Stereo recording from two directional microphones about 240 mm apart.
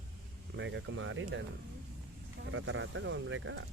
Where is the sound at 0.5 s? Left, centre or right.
Right.